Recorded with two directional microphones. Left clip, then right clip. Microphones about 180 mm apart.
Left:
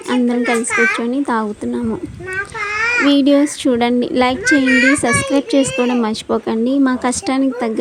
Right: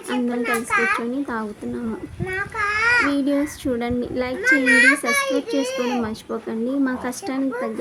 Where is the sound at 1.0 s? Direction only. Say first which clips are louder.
Left 8 dB; 35° left (ahead or behind).